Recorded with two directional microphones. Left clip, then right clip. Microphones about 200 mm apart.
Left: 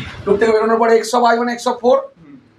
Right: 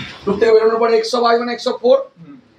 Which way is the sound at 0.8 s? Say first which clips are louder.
Left 2 dB; 25° left (ahead or behind).